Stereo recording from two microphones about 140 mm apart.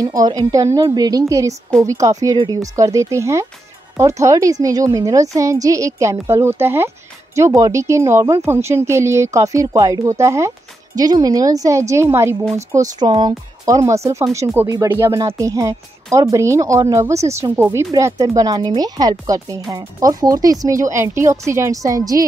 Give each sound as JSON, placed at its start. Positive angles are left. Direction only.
{"t": 0.0, "sound": "speech", "side_deg": -25}